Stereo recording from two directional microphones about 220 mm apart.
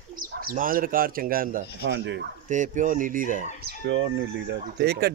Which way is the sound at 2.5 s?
35° right (ahead or behind).